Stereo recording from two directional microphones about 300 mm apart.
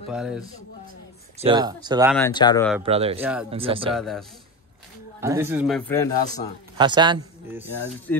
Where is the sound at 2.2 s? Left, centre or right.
Centre.